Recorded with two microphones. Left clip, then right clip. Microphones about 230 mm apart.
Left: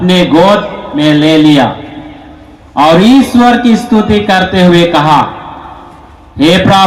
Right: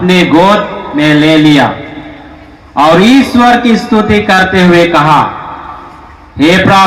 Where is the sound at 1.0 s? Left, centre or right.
Left.